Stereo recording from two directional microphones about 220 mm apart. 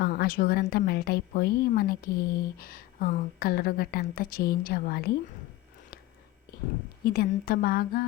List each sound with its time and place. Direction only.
0.0 s a woman's voice: 45° left (ahead or behind)
7.0 s a woman's voice: 45° left (ahead or behind)